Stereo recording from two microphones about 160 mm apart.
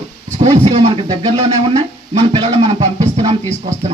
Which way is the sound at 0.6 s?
40° right (ahead or behind).